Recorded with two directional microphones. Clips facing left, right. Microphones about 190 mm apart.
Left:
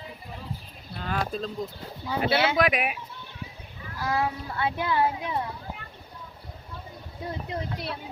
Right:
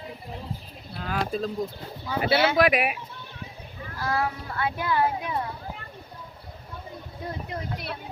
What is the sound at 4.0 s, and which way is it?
Speech, 20° left (ahead or behind).